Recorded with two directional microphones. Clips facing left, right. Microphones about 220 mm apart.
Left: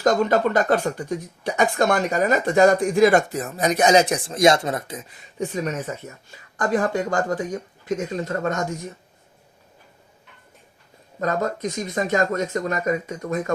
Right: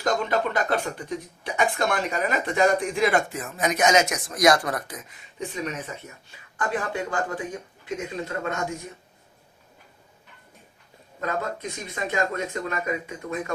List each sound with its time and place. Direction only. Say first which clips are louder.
0.0 s speech: left 6 dB; 45° left (ahead or behind); by 5.1 s 25° left (ahead or behind)
5.9 s speech: left 6 dB; 45° left (ahead or behind)
11.2 s speech: left 5 dB; 40° left (ahead or behind)